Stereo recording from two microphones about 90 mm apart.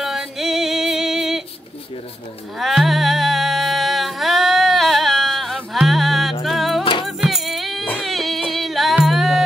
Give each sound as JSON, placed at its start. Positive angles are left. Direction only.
{"t": 0.0, "sound": "music", "side_deg": -5}
{"t": 2.6, "sound": "music", "side_deg": 0}
{"t": 6.8, "sound": "music", "side_deg": 75}
{"t": 7.2, "sound": "music", "side_deg": 0}